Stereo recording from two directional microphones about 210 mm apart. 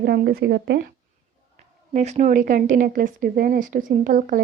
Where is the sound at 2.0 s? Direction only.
35° right (ahead or behind).